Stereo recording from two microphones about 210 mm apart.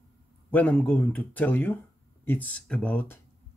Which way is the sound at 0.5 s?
5° left (ahead or behind).